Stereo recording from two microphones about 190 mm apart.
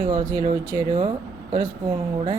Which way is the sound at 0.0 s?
20° right (ahead or behind).